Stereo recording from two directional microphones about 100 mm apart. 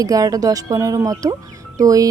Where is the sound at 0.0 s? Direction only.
35° right (ahead or behind).